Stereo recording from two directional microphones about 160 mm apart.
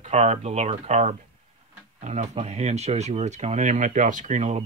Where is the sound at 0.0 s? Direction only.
45° right (ahead or behind).